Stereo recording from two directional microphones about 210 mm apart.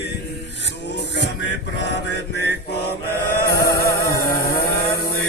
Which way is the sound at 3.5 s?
45° left (ahead or behind).